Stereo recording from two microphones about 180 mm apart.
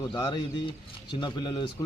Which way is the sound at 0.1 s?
25° left (ahead or behind).